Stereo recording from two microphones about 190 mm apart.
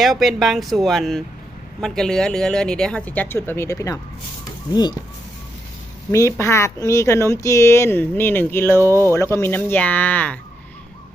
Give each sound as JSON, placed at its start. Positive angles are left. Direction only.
{"t": 0.0, "sound": "speech", "side_deg": 0}
{"t": 6.1, "sound": "speech", "side_deg": 15}
{"t": 8.8, "sound": "speech", "side_deg": -15}
{"t": 9.3, "sound": "speech", "side_deg": 10}